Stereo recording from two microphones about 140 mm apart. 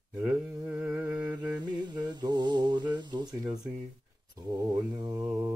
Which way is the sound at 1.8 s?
30° right (ahead or behind).